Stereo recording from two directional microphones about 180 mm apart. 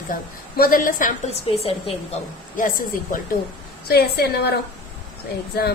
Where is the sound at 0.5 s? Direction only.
55° left (ahead or behind).